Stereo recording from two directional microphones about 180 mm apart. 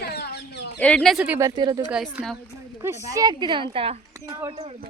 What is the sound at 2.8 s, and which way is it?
Speech, 15° right (ahead or behind).